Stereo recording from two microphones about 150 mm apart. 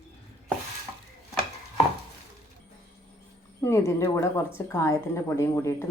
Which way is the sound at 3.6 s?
20° left (ahead or behind).